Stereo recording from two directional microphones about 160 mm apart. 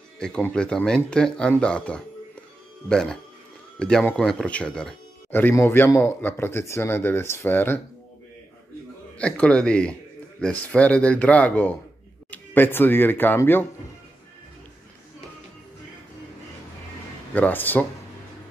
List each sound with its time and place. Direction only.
0.2 s speech: 5° left (ahead or behind)
9.2 s speech: 5° left (ahead or behind)
17.3 s speech: 10° left (ahead or behind)